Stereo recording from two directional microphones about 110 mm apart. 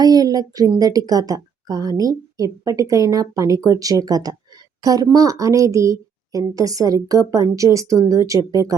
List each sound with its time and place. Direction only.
0.0 s a woman's voice: 35° right (ahead or behind)